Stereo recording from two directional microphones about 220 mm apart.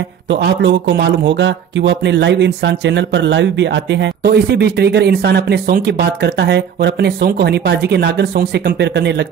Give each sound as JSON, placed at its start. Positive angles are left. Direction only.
{"t": 0.3, "sound": "speech", "side_deg": -55}